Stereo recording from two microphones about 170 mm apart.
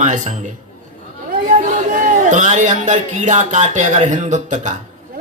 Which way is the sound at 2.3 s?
45° right (ahead or behind).